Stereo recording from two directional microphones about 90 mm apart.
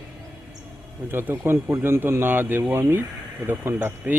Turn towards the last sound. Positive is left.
turn(degrees=-20)  # may be behind; listen again after turning